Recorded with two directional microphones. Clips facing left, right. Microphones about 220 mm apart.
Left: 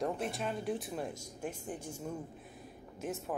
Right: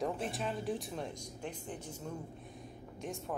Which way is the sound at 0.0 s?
Centre (ahead or behind).